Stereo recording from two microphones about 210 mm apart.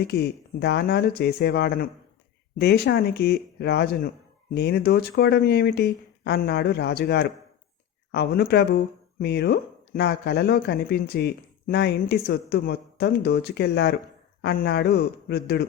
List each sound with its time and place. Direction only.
0.1 s speech: 50° left (ahead or behind)